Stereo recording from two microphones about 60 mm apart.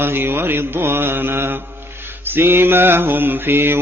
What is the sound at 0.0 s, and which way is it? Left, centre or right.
Mantra, right.